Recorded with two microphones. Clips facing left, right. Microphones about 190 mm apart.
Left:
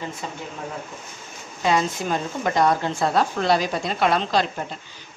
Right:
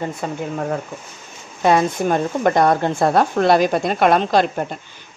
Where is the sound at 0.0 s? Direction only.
55° right (ahead or behind).